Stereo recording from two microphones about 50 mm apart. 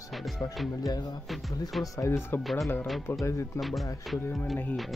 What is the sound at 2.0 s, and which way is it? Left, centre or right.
Speech, left.